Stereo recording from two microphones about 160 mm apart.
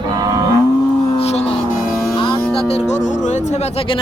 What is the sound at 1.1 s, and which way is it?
Speech, 40° left (ahead or behind).